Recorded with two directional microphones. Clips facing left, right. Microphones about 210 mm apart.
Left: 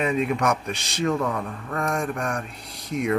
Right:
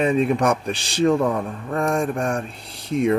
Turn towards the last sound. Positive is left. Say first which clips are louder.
# right 5 dB
turn(degrees=-30)  # may be behind; listen again after turning